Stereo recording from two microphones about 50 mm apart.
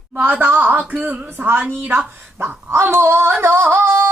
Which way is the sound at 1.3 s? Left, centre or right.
Right.